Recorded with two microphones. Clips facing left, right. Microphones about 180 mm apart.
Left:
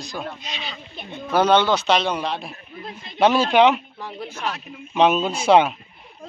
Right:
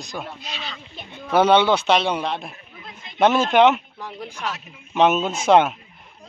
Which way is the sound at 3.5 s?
5° left (ahead or behind).